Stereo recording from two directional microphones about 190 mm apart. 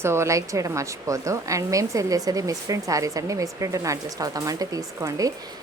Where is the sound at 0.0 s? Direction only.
15° right (ahead or behind).